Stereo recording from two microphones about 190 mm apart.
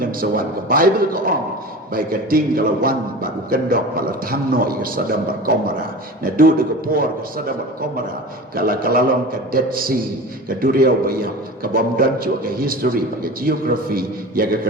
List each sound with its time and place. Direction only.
0.2 s a man's voice: 50° right (ahead or behind)
6.3 s a man's voice: 50° right (ahead or behind)